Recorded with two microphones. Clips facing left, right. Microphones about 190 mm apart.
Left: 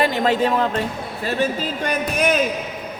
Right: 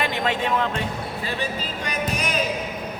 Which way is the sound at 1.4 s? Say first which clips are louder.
Left 7 dB; 55° left (ahead or behind).